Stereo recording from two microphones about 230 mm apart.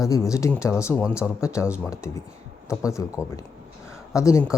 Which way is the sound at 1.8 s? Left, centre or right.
Centre.